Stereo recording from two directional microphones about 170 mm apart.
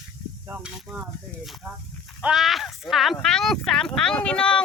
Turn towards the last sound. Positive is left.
turn(degrees=5)  # may be behind; listen again after turning